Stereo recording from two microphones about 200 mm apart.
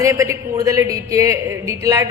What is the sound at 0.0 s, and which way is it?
A man's voice, 15° right (ahead or behind).